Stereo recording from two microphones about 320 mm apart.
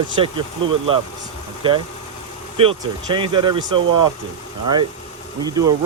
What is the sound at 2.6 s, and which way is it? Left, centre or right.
Speech, centre.